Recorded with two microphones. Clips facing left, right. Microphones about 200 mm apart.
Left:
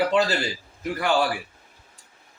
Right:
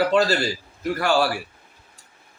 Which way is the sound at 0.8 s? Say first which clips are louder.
Right 2 dB; 15° left (ahead or behind).